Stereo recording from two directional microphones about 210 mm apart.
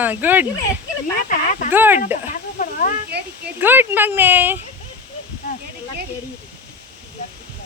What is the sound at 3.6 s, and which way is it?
Speech, 10° right (ahead or behind).